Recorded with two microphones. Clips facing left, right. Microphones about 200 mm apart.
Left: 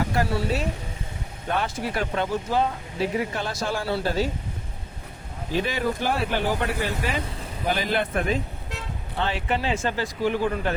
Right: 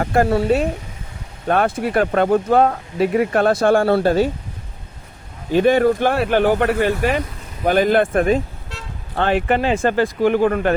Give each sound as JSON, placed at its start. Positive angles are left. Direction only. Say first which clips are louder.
{"t": 0.0, "sound": "speech", "louder": "right 8 dB", "side_deg": -50}
{"t": 5.5, "sound": "speech", "louder": "right 11 dB", "side_deg": -55}